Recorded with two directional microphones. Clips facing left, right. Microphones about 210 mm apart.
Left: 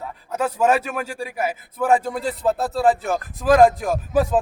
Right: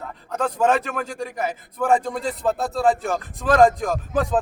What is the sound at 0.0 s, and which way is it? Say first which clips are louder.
A man's voice: left 1 dB; 10° left (ahead or behind).